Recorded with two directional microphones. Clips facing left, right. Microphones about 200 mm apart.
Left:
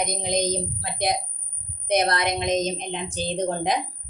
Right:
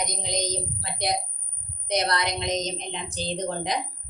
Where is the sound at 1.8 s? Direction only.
55° left (ahead or behind).